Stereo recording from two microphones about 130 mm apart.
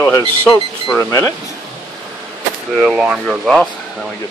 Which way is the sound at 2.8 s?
5° right (ahead or behind).